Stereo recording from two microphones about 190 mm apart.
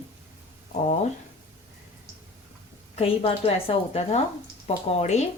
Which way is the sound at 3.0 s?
30° left (ahead or behind).